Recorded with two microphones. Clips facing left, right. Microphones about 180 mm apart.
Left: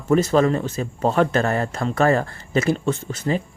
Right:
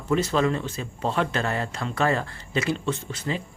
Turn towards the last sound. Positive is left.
turn(degrees=45)  # may be behind; listen again after turning